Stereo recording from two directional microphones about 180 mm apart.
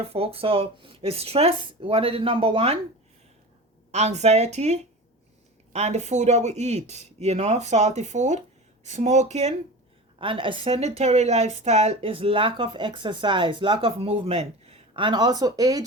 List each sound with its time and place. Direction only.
0.0 s speech: 35° right (ahead or behind)
3.9 s speech: 40° right (ahead or behind); by 15.8 s 20° right (ahead or behind)